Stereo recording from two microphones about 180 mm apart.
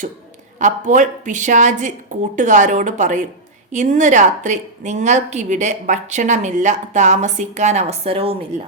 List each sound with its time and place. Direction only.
0.6 s a woman's voice: 45° right (ahead or behind)